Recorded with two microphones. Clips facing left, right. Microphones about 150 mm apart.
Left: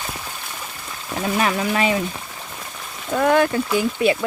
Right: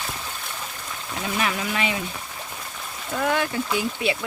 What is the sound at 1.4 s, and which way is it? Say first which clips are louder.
Speech: left 5 dB; 40° left (ahead or behind).